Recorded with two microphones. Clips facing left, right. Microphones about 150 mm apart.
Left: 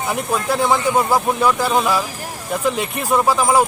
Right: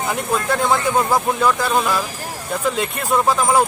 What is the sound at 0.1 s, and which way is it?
Speech, 10° left (ahead or behind).